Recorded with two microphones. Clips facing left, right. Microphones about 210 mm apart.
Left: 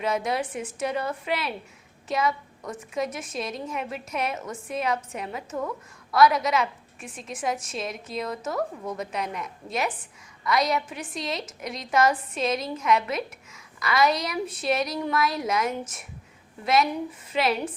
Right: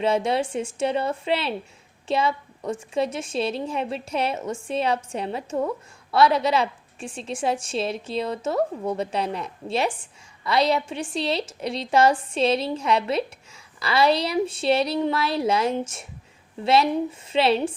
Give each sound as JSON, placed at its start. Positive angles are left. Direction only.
{"t": 0.0, "sound": "a woman's voice", "side_deg": -30}